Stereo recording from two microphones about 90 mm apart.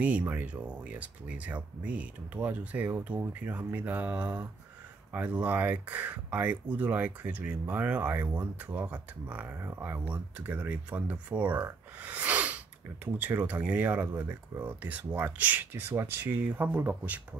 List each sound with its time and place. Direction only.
0.0 s speech: 15° right (ahead or behind)